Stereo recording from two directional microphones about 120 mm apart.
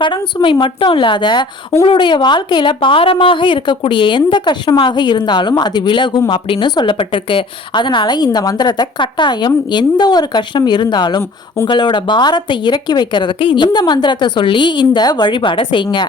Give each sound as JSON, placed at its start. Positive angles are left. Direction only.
{"t": 0.4, "sound": "a woman's voice", "side_deg": 45}
{"t": 11.2, "sound": "speech", "side_deg": 20}
{"t": 11.7, "sound": "a woman's voice", "side_deg": 40}